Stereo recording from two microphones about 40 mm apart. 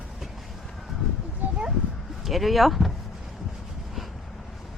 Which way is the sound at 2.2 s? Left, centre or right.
Centre.